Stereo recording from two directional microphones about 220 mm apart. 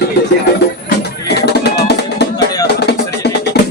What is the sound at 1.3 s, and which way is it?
Music, 50° left (ahead or behind).